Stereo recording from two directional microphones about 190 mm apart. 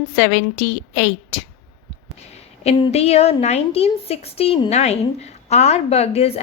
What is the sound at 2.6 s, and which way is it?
A woman's voice, 35° left (ahead or behind).